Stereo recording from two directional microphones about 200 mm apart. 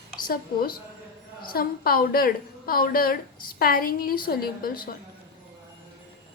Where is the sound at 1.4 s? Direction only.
50° left (ahead or behind).